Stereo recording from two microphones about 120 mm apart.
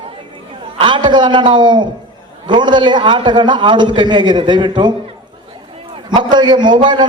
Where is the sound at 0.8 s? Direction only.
40° right (ahead or behind).